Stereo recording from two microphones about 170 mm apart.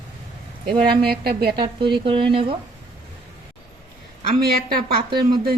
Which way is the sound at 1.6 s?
30° right (ahead or behind).